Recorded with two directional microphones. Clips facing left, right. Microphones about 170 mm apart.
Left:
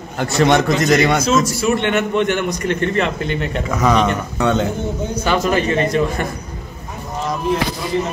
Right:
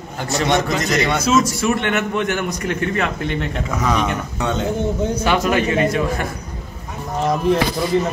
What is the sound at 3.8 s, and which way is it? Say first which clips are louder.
Speech: left 5 dB; 65° left (ahead or behind).